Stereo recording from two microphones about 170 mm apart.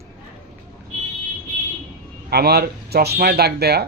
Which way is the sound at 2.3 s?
70° right (ahead or behind).